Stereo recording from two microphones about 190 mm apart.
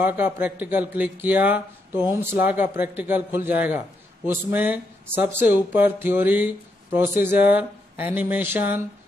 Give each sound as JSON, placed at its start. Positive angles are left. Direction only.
{"t": 0.0, "sound": "speech", "side_deg": -10}